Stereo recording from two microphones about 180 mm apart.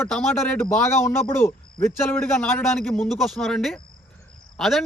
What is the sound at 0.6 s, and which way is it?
A man's voice, 15° left (ahead or behind).